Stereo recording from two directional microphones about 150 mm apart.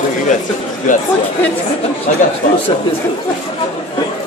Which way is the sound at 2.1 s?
60° left (ahead or behind).